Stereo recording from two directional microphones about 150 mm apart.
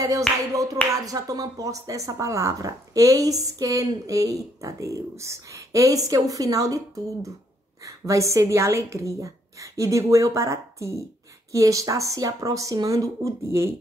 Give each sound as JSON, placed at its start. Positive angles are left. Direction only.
{"t": 0.5, "sound": "speech", "side_deg": -25}
{"t": 7.8, "sound": "speech", "side_deg": -20}